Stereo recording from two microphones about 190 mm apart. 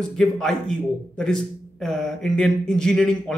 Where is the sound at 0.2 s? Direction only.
5° left (ahead or behind).